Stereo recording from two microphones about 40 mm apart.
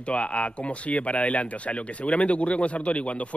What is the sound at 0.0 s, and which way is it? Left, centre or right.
Speech, left.